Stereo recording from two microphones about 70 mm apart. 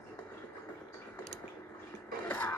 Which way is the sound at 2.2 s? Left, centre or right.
Left.